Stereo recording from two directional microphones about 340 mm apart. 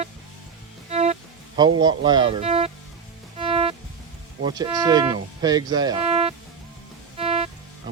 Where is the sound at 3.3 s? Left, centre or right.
Centre.